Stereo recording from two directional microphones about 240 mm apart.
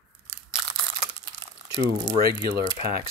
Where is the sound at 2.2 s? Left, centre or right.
Right.